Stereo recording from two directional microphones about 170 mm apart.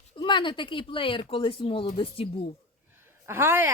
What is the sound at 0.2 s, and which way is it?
Speech, 30° left (ahead or behind).